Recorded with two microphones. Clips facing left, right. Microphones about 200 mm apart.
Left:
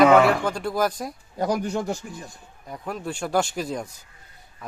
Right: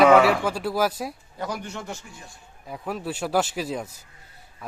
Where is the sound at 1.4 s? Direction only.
35° left (ahead or behind).